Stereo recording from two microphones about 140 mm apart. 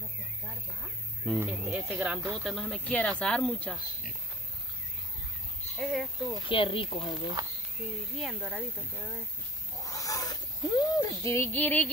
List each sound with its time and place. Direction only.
1.3 s speech: 5° left (ahead or behind)
5.8 s speech: centre (ahead or behind)
6.5 s speech: 40° left (ahead or behind)
7.8 s speech: 10° right (ahead or behind)
9.8 s a sound: 25° left (ahead or behind)